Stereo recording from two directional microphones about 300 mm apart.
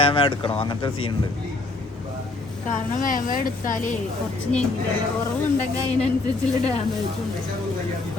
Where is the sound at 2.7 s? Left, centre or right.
Left.